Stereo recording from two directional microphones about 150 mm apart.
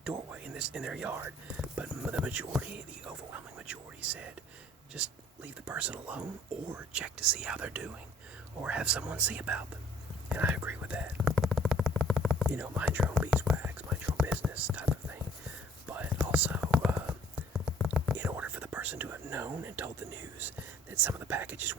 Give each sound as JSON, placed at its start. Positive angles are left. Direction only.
{"t": 0.0, "sound": "speech", "side_deg": -5}
{"t": 10.3, "sound": "whispering", "side_deg": -10}
{"t": 17.8, "sound": "speech", "side_deg": -10}